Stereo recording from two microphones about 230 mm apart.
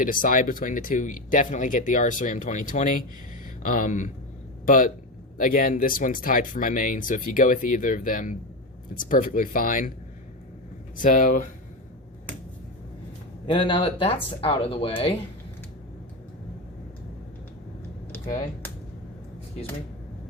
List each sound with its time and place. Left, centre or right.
0.0 s speech: left
10.9 s speech: left
13.5 s speech: left
18.1 s speech: centre